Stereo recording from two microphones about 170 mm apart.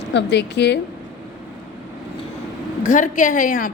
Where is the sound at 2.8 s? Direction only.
50° left (ahead or behind).